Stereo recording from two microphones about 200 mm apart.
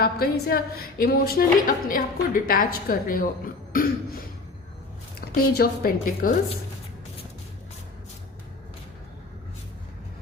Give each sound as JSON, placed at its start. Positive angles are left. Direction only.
{"t": 0.0, "sound": "a woman's voice", "side_deg": 50}
{"t": 5.2, "sound": "a woman's voice", "side_deg": 50}